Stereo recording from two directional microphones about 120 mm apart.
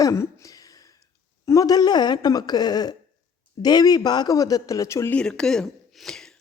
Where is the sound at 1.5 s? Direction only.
30° left (ahead or behind).